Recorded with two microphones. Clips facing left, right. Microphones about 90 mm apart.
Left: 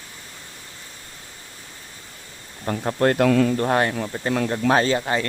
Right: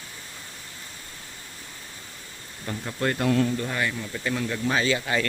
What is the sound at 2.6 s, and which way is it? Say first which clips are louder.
Speech: left 8 dB; 50° left (ahead or behind).